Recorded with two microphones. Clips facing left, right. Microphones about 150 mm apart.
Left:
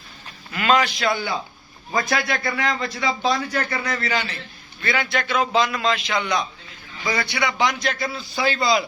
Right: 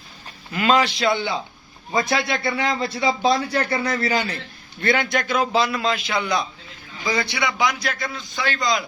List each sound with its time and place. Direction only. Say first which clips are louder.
0.5 s a man's voice: right 1 dB; 30° right (ahead or behind)
4.8 s a man's voice: right 4 dB; 55° right (ahead or behind)
5.1 s speech: even; 40° right (ahead or behind)
7.1 s a man's voice: even; 20° right (ahead or behind)
7.6 s a man's voice: left 1 dB; 10° right (ahead or behind)